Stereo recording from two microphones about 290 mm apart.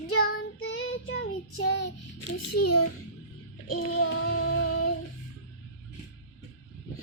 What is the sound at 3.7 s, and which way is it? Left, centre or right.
Music, left.